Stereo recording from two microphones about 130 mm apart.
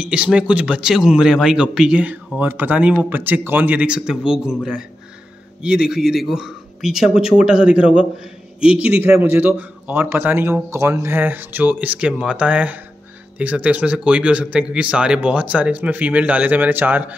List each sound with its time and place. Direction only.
0.0 s a man's voice: 10° right (ahead or behind)
5.6 s a man's voice: 5° right (ahead or behind)